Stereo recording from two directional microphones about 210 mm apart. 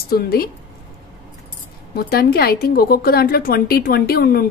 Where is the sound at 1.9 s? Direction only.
45° left (ahead or behind).